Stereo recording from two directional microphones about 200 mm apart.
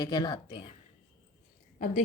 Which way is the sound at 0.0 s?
20° left (ahead or behind).